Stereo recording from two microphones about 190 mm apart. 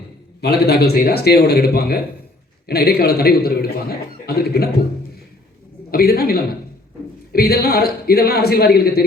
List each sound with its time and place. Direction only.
0.4 s a man's voice: 60° left (ahead or behind)
5.9 s a man's voice: 50° left (ahead or behind)